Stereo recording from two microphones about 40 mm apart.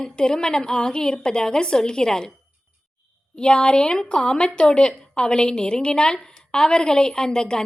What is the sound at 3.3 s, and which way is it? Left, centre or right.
A woman's voice, left.